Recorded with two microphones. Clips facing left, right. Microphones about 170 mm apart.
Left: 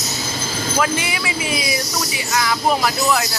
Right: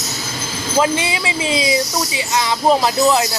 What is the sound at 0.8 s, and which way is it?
Speech, 25° right (ahead or behind).